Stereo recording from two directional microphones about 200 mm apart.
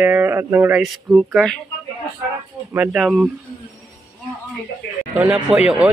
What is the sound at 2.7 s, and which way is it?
Speech, 5° right (ahead or behind).